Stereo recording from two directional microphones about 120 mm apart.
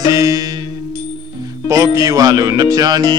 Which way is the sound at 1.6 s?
25° right (ahead or behind).